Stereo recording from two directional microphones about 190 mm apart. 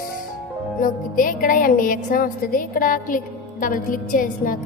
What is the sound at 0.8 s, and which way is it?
A woman's voice, 45° left (ahead or behind).